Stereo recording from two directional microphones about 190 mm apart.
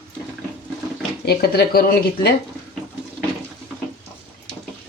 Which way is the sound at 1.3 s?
55° left (ahead or behind).